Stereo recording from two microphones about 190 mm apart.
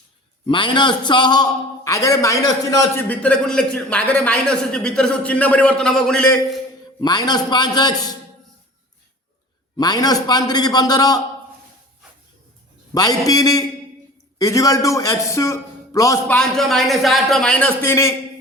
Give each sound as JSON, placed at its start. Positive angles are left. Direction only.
{"t": 0.4, "sound": "a man's voice", "side_deg": 25}
{"t": 7.0, "sound": "a man's voice", "side_deg": 20}
{"t": 9.7, "sound": "a man's voice", "side_deg": 20}
{"t": 12.9, "sound": "a man's voice", "side_deg": 20}